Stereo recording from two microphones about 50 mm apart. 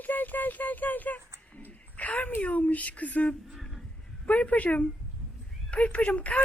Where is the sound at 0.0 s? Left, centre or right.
Left.